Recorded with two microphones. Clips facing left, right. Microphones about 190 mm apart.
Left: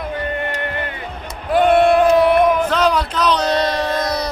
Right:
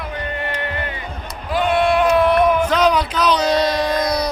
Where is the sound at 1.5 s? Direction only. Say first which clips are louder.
Left 4 dB; 55° left (ahead or behind).